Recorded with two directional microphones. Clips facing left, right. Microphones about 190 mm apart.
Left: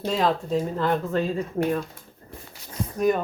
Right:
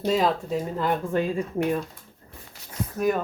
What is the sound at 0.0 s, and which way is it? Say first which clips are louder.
Speech: right 1 dB; 5° right (ahead or behind).